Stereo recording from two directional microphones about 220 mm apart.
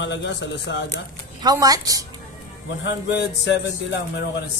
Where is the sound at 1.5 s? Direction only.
15° right (ahead or behind).